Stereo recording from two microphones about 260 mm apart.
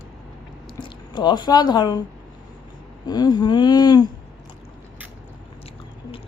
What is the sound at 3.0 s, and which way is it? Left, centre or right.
Speech, centre.